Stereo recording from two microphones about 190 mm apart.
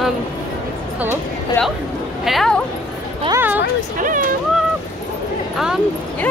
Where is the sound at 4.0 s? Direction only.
45° right (ahead or behind).